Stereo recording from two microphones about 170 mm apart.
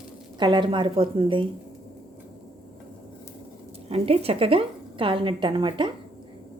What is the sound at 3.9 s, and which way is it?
A woman's voice, 35° right (ahead or behind).